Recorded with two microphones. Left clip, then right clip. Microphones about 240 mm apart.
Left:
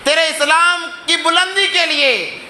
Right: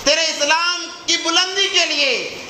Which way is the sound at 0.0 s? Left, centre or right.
Left.